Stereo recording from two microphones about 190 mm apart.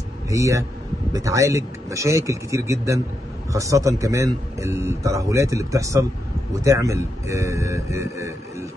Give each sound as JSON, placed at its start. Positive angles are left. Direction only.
{"t": 0.3, "sound": "a man's voice", "side_deg": -15}